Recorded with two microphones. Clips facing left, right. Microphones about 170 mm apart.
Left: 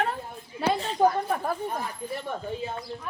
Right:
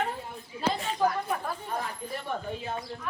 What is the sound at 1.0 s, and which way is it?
Speech, 20° left (ahead or behind).